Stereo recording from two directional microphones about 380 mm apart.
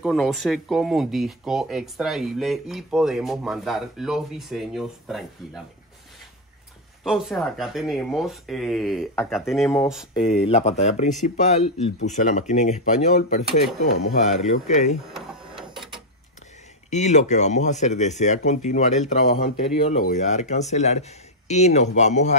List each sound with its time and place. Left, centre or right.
0.0 s speech: centre
7.1 s speech: centre
10.1 s speech: centre
15.1 s printer: centre
16.9 s speech: centre